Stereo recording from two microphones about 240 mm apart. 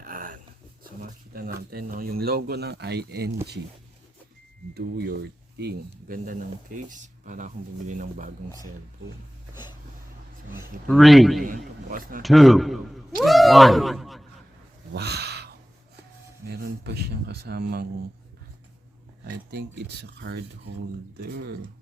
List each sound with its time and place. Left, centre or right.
0.0 s a sound: right
1.3 s speech: right
4.7 s speech: right
10.8 s speech: centre
11.4 s speech: right
12.2 s speech: centre
14.9 s a sound: right
16.5 s speech: right
19.2 s speech: right